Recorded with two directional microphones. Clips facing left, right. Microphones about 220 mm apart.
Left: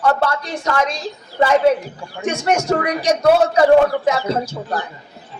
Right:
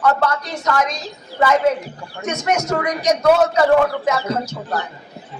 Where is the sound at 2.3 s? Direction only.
30° left (ahead or behind).